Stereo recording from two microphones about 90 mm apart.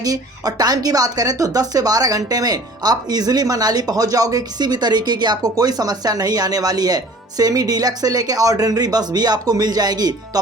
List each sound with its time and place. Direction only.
0.0 s speech: 45° right (ahead or behind)